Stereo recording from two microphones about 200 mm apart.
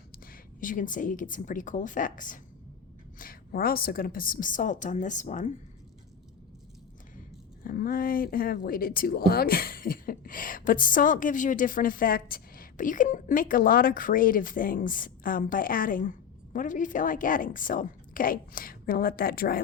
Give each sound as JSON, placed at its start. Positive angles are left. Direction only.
{"t": 0.3, "sound": "a woman's voice", "side_deg": 40}
{"t": 7.6, "sound": "a woman's voice", "side_deg": 45}